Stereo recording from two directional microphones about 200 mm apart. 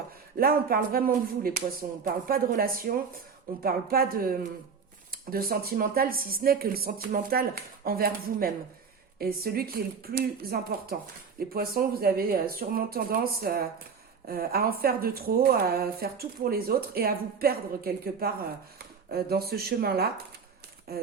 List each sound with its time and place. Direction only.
0.3 s speech: 45° right (ahead or behind)